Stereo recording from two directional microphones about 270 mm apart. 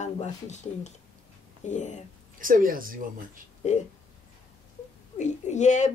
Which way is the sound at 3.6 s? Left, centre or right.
Left.